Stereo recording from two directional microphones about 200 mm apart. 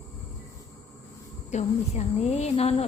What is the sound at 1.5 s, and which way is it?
Speech, 35° left (ahead or behind).